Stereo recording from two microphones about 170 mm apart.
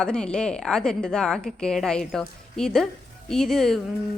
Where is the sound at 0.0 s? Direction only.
5° left (ahead or behind).